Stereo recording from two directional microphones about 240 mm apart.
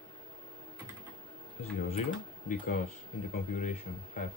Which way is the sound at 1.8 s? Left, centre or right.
Left.